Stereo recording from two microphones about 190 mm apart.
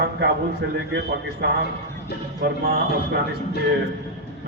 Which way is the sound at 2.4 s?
50° right (ahead or behind).